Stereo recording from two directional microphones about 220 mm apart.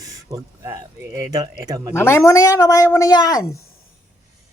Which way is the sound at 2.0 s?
10° left (ahead or behind).